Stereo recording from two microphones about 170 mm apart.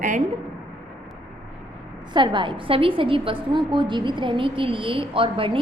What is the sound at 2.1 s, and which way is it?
A woman's voice, 30° right (ahead or behind).